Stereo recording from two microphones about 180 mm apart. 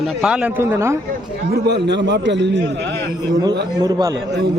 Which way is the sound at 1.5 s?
70° right (ahead or behind).